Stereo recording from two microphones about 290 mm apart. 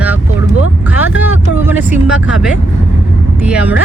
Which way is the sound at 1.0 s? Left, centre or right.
Centre.